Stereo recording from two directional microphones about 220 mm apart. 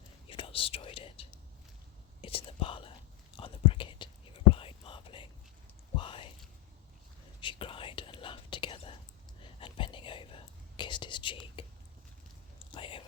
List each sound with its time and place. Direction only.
0.3 s whispering: 25° left (ahead or behind)
7.4 s whispering: 25° left (ahead or behind)
12.7 s whispering: 25° left (ahead or behind)